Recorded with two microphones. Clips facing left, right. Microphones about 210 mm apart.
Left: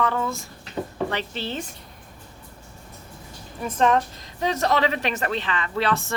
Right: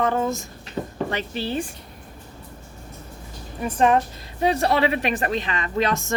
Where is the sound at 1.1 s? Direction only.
10° right (ahead or behind).